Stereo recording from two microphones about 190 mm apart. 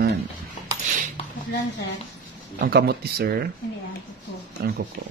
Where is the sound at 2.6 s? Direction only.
60° right (ahead or behind).